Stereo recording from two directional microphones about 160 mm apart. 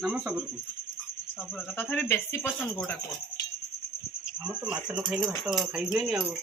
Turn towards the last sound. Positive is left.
turn(degrees=-5)  # may be behind; listen again after turning